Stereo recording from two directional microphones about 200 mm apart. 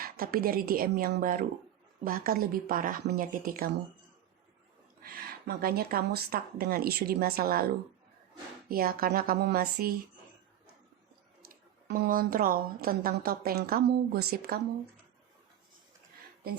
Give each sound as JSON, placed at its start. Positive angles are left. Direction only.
{"t": 0.0, "sound": "a woman's voice", "side_deg": -45}
{"t": 5.0, "sound": "a woman's voice", "side_deg": -50}
{"t": 8.7, "sound": "a woman's voice", "side_deg": -45}
{"t": 11.9, "sound": "a woman's voice", "side_deg": -50}